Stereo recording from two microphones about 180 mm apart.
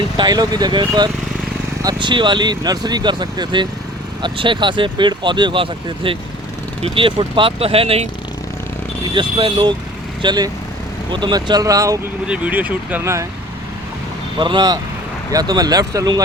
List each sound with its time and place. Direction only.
0.2 s speech: 20° right (ahead or behind)
9.1 s speech: 25° right (ahead or behind)
12.3 s speech: 10° right (ahead or behind)
14.3 s speech: 25° right (ahead or behind)